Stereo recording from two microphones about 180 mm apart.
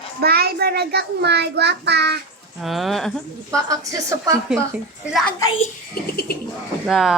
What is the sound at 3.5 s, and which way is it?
Speech, 15° right (ahead or behind).